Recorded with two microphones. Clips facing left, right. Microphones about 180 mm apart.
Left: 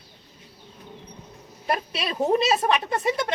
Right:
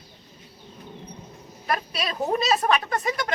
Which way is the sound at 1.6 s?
25° left (ahead or behind).